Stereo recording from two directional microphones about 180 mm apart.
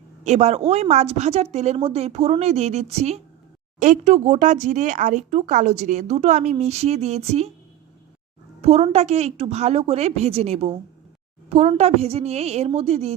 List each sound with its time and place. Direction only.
0.3 s speech: 40° right (ahead or behind)
8.6 s speech: 35° right (ahead or behind)